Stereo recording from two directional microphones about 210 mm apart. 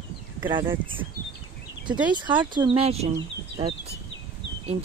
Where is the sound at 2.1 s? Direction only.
20° right (ahead or behind).